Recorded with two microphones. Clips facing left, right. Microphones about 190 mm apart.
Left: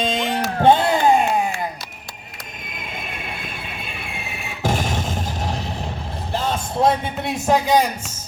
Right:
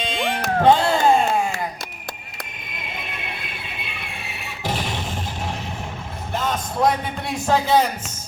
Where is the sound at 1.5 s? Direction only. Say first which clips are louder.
Left 1 dB; 50° right (ahead or behind).